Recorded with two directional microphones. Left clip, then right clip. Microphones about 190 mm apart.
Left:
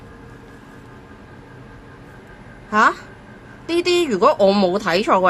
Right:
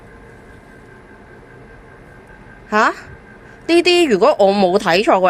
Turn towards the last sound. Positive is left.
turn(degrees=-25)  # may be behind; listen again after turning